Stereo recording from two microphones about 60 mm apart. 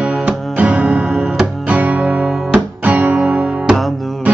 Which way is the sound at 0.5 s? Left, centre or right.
Right.